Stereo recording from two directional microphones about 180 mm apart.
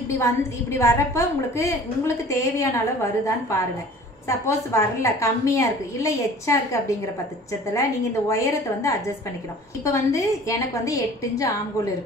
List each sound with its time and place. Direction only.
0.2 s a woman's voice: 15° left (ahead or behind)
9.8 s a woman's voice: 20° left (ahead or behind)